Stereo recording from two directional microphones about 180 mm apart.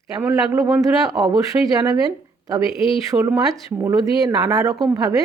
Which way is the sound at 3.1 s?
20° right (ahead or behind).